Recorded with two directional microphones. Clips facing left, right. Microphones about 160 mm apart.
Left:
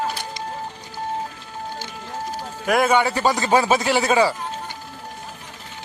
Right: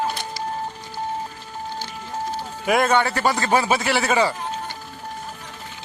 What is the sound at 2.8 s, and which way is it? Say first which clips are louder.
A man's voice: left 1 dB; 10° left (ahead or behind).